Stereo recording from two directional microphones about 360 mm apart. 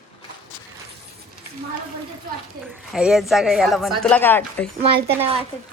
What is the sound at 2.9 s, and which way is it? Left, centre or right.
A woman's voice, centre.